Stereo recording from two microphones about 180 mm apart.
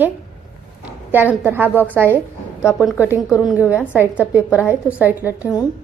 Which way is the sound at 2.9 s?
10° right (ahead or behind).